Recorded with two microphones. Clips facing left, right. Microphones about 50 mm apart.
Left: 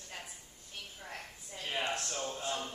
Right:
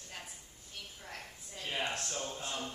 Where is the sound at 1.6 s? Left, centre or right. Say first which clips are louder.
Left 1 dB; centre.